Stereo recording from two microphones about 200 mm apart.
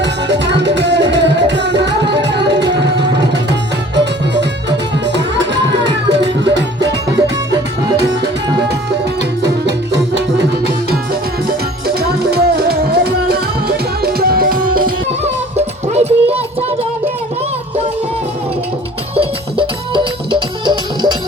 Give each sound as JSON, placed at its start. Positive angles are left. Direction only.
{"t": 0.0, "sound": "music", "side_deg": -60}
{"t": 3.3, "sound": "tabla", "side_deg": -60}
{"t": 5.0, "sound": "music", "side_deg": -60}
{"t": 7.9, "sound": "music", "side_deg": -55}
{"t": 9.4, "sound": "music", "side_deg": -60}
{"t": 11.9, "sound": "music", "side_deg": -55}
{"t": 15.2, "sound": "music", "side_deg": -35}
{"t": 19.1, "sound": "music", "side_deg": -25}